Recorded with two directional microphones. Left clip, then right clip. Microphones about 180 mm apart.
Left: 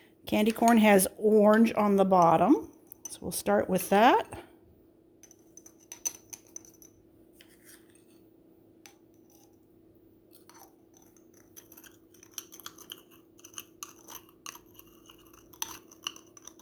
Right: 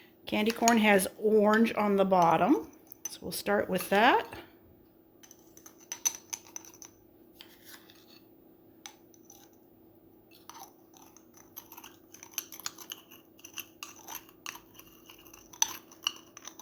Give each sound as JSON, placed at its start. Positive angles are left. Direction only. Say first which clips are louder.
{"t": 0.3, "sound": "speech", "louder": "left 2 dB", "side_deg": 60}
{"t": 5.9, "sound": "typing", "louder": "right 4 dB", "side_deg": 0}
{"t": 10.4, "sound": "a sound", "louder": "right 6 dB", "side_deg": 5}
{"t": 12.5, "sound": "scissors", "louder": "right 3 dB", "side_deg": 5}
{"t": 14.1, "sound": "chewing", "louder": "right 3 dB", "side_deg": 15}